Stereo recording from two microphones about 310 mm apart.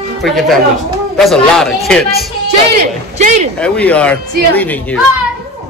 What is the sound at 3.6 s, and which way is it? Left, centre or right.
A man's voice, centre.